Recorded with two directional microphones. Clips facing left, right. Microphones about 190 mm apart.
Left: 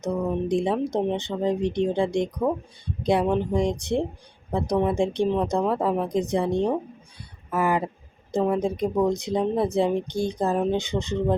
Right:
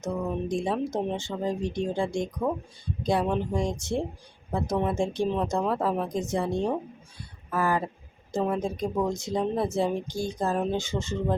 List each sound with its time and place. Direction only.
0.0 s a woman's voice: 15° left (ahead or behind)